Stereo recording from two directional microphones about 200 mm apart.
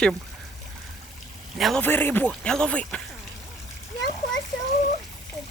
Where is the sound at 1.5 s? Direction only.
Centre (ahead or behind).